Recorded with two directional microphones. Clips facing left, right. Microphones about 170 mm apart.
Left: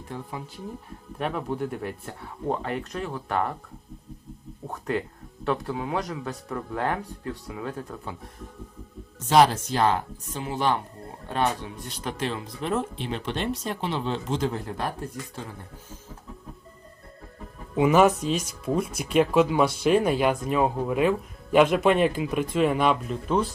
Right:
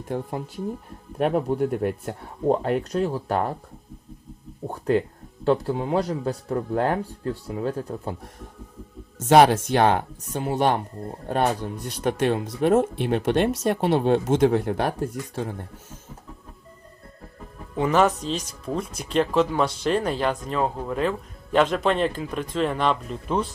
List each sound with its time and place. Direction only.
0.1 s speech: 55° right (ahead or behind); by 3.5 s 35° right (ahead or behind)
5.5 s speech: 30° right (ahead or behind)
9.3 s speech: 60° right (ahead or behind)
17.7 s speech: 10° left (ahead or behind)